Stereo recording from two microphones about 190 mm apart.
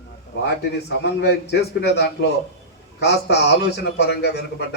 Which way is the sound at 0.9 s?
60° left (ahead or behind).